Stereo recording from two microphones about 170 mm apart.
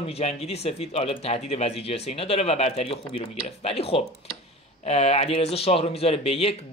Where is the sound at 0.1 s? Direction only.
40° left (ahead or behind).